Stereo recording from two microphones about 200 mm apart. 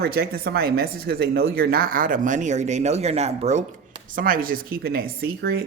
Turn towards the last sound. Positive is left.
turn(degrees=-55)  # may be behind; listen again after turning